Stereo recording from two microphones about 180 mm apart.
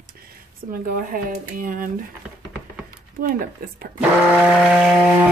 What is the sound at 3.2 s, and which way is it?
Speech, 50° right (ahead or behind).